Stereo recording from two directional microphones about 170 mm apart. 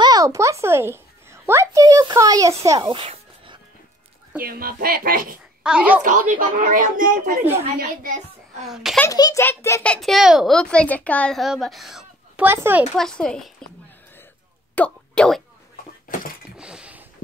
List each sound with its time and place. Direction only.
0.0 s a woman's voice: 20° right (ahead or behind)
2.9 s a sound: 30° right (ahead or behind)
4.4 s speech: 60° right (ahead or behind)
5.6 s a child's voice: 5° right (ahead or behind)
6.3 s speech: 50° right (ahead or behind)
8.6 s a child's voice: centre (ahead or behind)
9.0 s a child's voice: 20° left (ahead or behind)
9.9 s a child's voice: centre (ahead or behind)
12.9 s a child's voice: 5° left (ahead or behind)
14.8 s speech: 5° left (ahead or behind)
16.5 s a sound: 5° right (ahead or behind)